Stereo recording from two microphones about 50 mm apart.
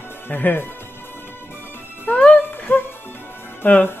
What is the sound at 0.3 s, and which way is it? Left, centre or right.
Speech, left.